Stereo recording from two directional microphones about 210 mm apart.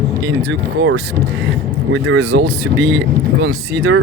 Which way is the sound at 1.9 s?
65° right (ahead or behind).